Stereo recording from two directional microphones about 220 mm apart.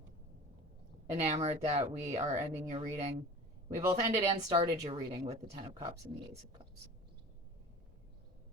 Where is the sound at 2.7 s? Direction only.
30° right (ahead or behind).